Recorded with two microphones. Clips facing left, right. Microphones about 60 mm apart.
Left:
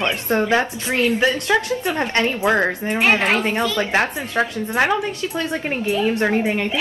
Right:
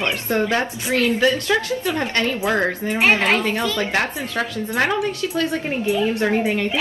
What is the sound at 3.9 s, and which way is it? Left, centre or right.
A woman's voice, left.